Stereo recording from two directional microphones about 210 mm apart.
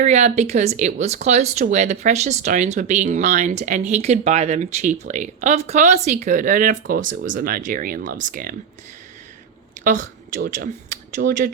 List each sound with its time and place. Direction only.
0.0 s speech: 35° right (ahead or behind)
9.8 s speech: 40° right (ahead or behind)